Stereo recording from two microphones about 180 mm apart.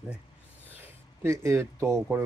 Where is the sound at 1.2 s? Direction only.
15° right (ahead or behind).